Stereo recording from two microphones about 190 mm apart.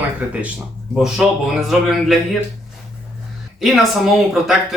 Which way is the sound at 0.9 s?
Centre (ahead or behind).